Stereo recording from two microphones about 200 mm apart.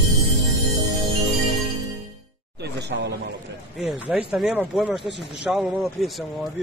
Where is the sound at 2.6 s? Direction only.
60° right (ahead or behind).